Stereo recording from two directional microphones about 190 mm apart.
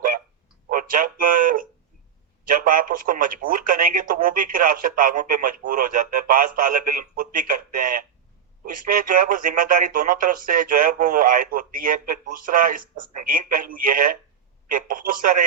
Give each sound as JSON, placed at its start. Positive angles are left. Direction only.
{"t": 0.7, "sound": "speech", "side_deg": -45}